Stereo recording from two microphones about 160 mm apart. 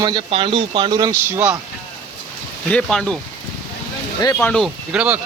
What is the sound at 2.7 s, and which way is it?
Speech, 5° left (ahead or behind).